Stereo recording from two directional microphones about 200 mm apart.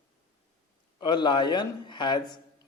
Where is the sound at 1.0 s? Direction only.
20° left (ahead or behind).